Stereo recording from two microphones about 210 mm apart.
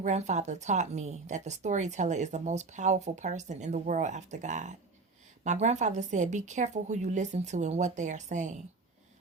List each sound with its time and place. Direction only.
0.0 s speech: 35° right (ahead or behind)